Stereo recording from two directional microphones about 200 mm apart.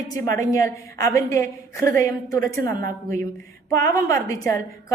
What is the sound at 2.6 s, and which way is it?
Speech, 45° right (ahead or behind).